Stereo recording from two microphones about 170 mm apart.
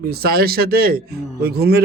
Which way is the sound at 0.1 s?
65° right (ahead or behind).